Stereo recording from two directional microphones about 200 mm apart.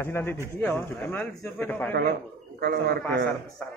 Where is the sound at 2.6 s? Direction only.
55° right (ahead or behind).